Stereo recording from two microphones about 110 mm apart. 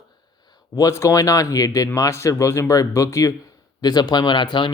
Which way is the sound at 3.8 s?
40° left (ahead or behind).